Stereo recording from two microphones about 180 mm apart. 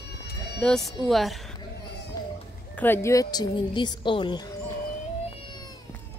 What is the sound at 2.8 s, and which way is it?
A woman's voice, 15° left (ahead or behind).